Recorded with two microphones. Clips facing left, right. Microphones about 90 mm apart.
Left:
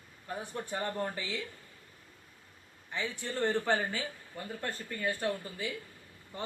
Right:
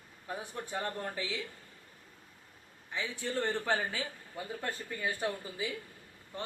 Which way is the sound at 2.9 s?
Centre (ahead or behind).